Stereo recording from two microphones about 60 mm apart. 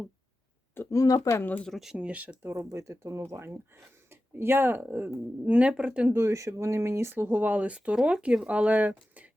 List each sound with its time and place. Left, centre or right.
0.9 s speech: left
2.0 s speech: right
2.4 s speech: right
2.6 s speech: right
5.5 s speech: centre
6.1 s speech: right